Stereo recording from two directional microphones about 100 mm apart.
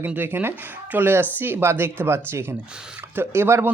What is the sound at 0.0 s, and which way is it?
Speech, 20° right (ahead or behind).